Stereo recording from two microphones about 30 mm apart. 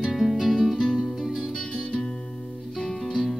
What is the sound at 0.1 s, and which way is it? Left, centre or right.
Music, centre.